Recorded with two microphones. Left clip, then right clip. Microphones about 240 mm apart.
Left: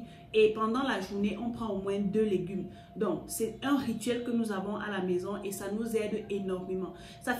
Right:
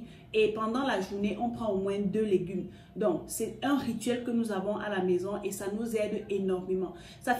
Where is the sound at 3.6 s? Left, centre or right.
Right.